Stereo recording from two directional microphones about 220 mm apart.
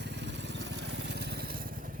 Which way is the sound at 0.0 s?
50° right (ahead or behind).